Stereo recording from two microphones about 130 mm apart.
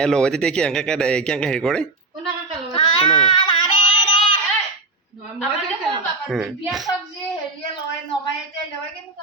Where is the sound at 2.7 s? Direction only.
50° left (ahead or behind).